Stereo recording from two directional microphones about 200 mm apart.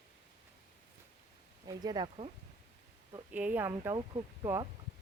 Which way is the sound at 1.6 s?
20° right (ahead or behind).